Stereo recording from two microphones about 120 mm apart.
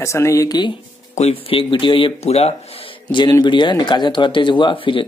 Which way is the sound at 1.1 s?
60° left (ahead or behind).